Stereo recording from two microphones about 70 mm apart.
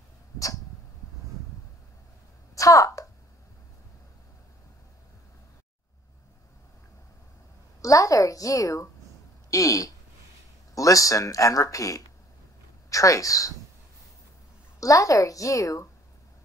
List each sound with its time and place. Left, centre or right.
2.5 s a sound: left
7.8 s speech: left
14.8 s speech: left